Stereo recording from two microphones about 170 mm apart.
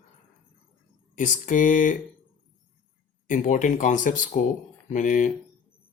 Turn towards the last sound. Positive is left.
turn(degrees=50)  # may be behind; listen again after turning